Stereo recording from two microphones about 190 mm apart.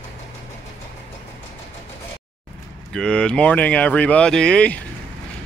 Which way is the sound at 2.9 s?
5° left (ahead or behind).